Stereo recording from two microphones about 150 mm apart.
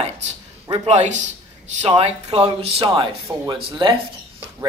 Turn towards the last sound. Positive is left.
turn(degrees=-30)  # may be behind; listen again after turning